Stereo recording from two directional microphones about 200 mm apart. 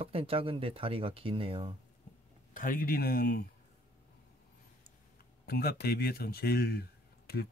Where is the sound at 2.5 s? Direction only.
45° left (ahead or behind).